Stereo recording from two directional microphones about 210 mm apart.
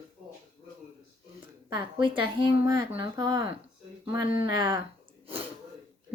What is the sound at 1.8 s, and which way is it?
A woman's voice, 25° right (ahead or behind).